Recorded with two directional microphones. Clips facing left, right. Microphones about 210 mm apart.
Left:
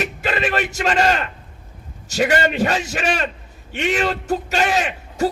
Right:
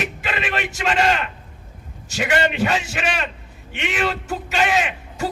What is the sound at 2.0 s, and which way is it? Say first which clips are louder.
A man's voice: left 3 dB; 40° left (ahead or behind).